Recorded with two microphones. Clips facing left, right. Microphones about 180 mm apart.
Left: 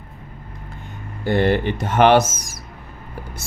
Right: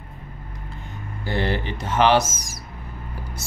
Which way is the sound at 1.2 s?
55° left (ahead or behind).